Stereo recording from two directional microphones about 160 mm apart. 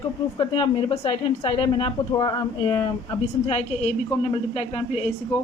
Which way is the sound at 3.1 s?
40° left (ahead or behind).